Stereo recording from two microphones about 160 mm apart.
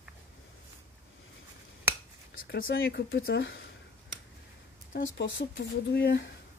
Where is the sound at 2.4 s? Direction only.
75° left (ahead or behind).